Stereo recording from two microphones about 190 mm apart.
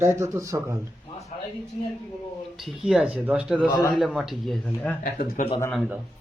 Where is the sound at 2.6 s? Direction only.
Centre (ahead or behind).